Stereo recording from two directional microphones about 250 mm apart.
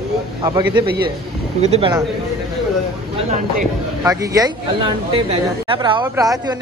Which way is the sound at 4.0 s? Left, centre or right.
Centre.